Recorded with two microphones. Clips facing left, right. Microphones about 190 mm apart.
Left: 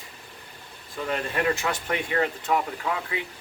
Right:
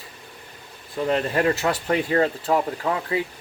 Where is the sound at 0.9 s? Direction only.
30° right (ahead or behind).